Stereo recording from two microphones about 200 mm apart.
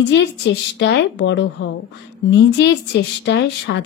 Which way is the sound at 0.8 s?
60° left (ahead or behind).